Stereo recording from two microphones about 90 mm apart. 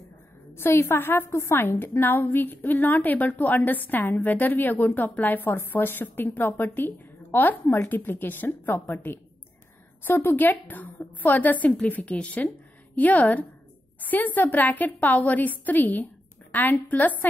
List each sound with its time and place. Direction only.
0.6 s a woman's voice: 25° left (ahead or behind)